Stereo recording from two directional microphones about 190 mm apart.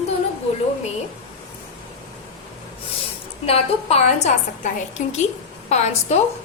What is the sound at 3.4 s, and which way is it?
A woman's voice, 35° left (ahead or behind).